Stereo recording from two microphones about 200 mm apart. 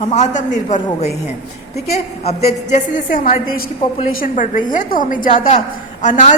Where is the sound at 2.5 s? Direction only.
35° left (ahead or behind).